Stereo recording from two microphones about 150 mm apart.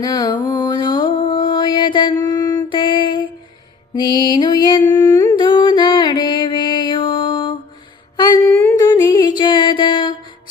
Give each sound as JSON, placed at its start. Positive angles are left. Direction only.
{"t": 0.0, "sound": "mantra", "side_deg": 25}
{"t": 4.1, "sound": "music", "side_deg": -25}
{"t": 4.4, "sound": "music", "side_deg": 30}
{"t": 8.1, "sound": "a sound", "side_deg": 25}
{"t": 8.4, "sound": "a sound", "side_deg": 15}
{"t": 8.8, "sound": "music", "side_deg": 25}